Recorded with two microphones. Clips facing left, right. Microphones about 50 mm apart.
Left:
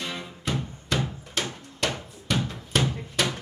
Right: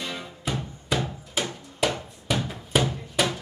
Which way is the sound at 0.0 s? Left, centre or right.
Centre.